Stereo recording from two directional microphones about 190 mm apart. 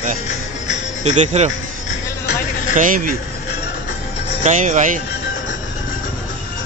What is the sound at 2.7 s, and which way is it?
Speech, 45° right (ahead or behind).